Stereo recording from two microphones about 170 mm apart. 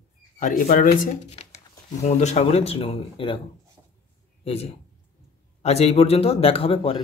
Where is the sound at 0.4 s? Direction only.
50° left (ahead or behind).